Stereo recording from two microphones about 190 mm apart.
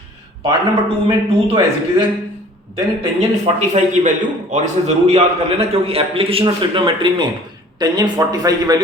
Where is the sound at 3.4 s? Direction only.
40° right (ahead or behind); by 8.8 s 20° right (ahead or behind).